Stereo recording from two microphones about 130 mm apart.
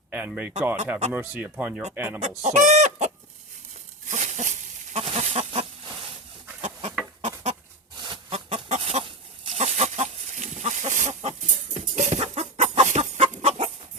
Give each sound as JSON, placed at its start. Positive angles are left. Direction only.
{"t": 0.1, "sound": "speech", "side_deg": -15}
{"t": 2.2, "sound": "chicken", "side_deg": -65}
{"t": 4.1, "sound": "a sound", "side_deg": -65}
{"t": 4.9, "sound": "goat", "side_deg": -55}
{"t": 6.6, "sound": "chicken", "side_deg": -60}
{"t": 12.9, "sound": "chicken", "side_deg": -70}